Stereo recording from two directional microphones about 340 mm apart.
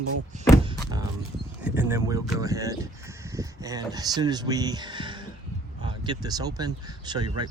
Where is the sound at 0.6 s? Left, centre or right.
Centre.